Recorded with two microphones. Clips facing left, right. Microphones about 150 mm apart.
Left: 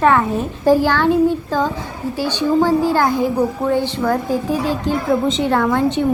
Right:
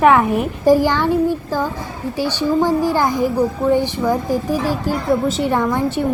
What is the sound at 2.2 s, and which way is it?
A woman's voice, 10° right (ahead or behind).